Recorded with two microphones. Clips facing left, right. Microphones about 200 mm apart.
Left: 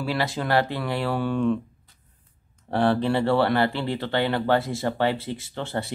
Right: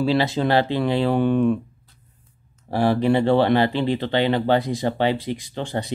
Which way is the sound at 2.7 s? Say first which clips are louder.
Right 3 dB; 10° right (ahead or behind).